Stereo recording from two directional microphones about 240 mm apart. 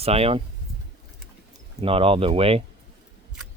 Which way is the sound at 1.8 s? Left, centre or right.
Right.